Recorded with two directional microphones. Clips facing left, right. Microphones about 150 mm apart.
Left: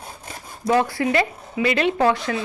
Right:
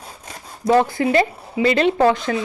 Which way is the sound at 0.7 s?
25° right (ahead or behind).